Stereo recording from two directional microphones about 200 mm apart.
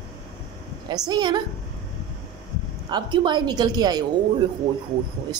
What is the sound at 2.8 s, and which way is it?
Speech, 20° right (ahead or behind).